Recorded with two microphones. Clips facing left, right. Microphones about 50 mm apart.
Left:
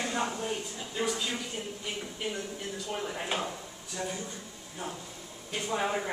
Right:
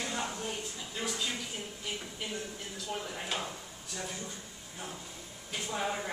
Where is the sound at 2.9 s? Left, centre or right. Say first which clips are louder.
Left 3 dB; centre.